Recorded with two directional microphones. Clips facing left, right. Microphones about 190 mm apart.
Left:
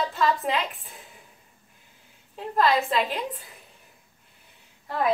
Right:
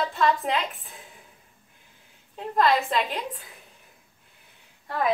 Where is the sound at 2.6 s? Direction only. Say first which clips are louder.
Even; centre (ahead or behind).